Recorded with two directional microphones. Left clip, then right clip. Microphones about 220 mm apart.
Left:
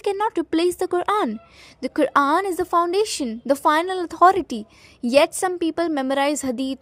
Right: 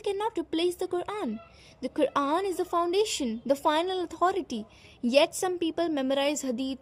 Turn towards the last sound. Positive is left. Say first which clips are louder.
# left 6 dB
turn(degrees=30)  # may be behind; listen again after turning